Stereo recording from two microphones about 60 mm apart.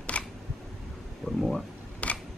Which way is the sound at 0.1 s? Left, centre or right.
Centre.